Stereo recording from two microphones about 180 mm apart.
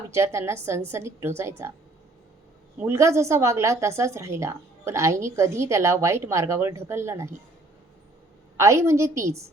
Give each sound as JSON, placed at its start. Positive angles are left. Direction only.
{"t": 0.1, "sound": "a woman's voice", "side_deg": -15}
{"t": 2.7, "sound": "a woman's voice", "side_deg": -15}
{"t": 8.5, "sound": "a woman's voice", "side_deg": -15}